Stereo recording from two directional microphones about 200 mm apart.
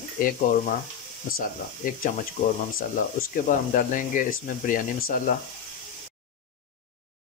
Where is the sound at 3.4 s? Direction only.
40° left (ahead or behind).